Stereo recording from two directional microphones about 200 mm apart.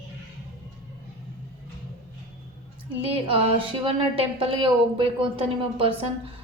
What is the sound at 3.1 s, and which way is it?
A woman's voice, 30° right (ahead or behind).